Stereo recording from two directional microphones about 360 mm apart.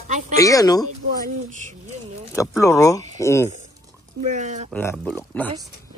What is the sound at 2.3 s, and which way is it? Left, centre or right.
Speech, centre.